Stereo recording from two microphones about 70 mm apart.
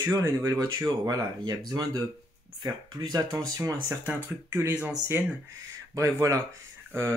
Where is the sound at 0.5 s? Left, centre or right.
Right.